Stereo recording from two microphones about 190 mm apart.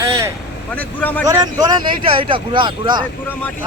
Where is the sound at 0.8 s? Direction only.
10° left (ahead or behind).